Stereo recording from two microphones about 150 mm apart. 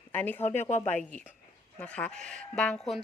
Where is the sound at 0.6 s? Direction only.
50° left (ahead or behind).